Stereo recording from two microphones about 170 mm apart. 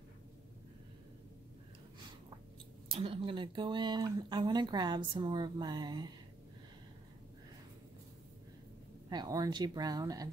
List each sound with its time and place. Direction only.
2.9 s speech: 35° right (ahead or behind)
9.1 s speech: 25° right (ahead or behind)